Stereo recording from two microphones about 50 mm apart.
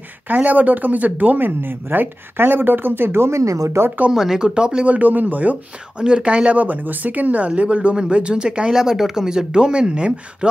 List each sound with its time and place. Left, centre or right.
0.3 s speech: right
4.1 s speech: centre
4.9 s speech: right; by 10.1 s centre